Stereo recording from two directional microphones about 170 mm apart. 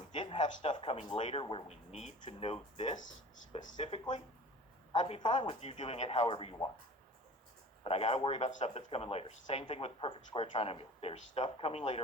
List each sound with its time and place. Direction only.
0.1 s speech: 25° left (ahead or behind)
7.9 s speech: 35° left (ahead or behind)
8.4 s speech: 45° left (ahead or behind)